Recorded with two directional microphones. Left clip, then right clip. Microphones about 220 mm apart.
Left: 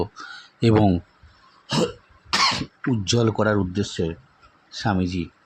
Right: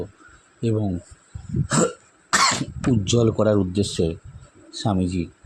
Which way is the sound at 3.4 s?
5° left (ahead or behind).